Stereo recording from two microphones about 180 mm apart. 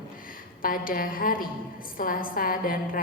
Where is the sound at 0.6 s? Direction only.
50° left (ahead or behind).